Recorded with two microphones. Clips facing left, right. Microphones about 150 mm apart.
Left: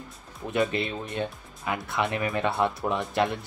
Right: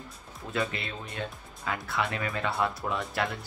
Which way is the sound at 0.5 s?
20° left (ahead or behind).